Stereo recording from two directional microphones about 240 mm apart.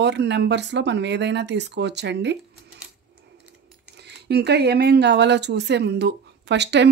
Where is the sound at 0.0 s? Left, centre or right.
Right.